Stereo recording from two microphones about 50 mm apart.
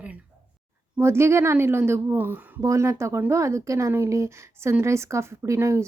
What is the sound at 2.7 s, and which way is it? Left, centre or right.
Speech, right.